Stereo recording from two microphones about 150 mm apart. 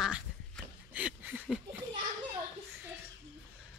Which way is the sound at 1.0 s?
10° right (ahead or behind).